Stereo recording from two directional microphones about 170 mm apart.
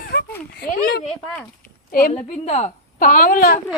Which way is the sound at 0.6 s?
70° left (ahead or behind).